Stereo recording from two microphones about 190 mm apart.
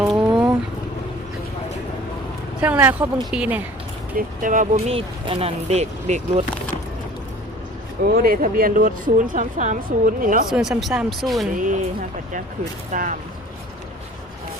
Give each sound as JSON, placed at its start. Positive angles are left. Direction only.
{"t": 0.0, "sound": "a sound", "side_deg": -5}
{"t": 2.6, "sound": "speech", "side_deg": -5}
{"t": 3.0, "sound": "speech", "side_deg": -20}
{"t": 3.3, "sound": "speech", "side_deg": -5}
{"t": 4.4, "sound": "speech", "side_deg": -40}
{"t": 8.0, "sound": "speech", "side_deg": -50}
{"t": 10.5, "sound": "speech", "side_deg": 0}
{"t": 11.5, "sound": "speech", "side_deg": -45}
{"t": 12.9, "sound": "speech", "side_deg": -40}